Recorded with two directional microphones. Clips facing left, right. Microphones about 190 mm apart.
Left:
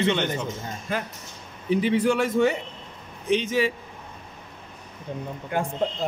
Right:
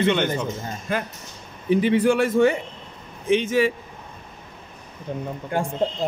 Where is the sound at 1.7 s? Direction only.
55° right (ahead or behind).